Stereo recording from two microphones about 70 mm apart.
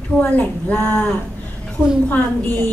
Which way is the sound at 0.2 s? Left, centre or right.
Centre.